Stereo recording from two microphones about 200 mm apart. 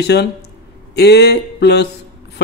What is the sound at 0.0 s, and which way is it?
A man's voice, 55° left (ahead or behind).